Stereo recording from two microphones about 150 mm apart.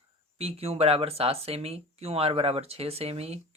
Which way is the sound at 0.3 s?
40° right (ahead or behind).